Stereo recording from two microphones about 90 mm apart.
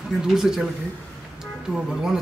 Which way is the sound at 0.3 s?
5° right (ahead or behind).